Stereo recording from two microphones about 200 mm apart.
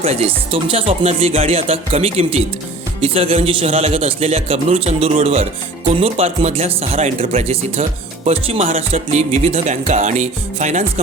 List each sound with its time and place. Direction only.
0.0 s a man's voice: 30° right (ahead or behind)